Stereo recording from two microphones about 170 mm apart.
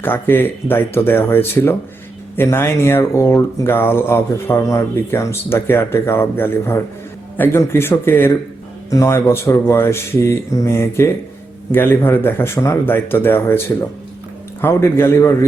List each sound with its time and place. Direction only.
0.0 s speech: 10° left (ahead or behind)
14.6 s speech: 15° left (ahead or behind)